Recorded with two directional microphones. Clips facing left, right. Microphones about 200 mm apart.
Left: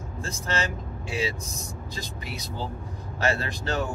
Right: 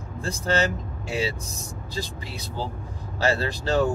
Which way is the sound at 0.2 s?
35° right (ahead or behind).